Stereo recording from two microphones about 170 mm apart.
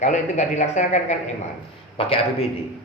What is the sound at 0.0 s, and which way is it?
Speech, 45° left (ahead or behind).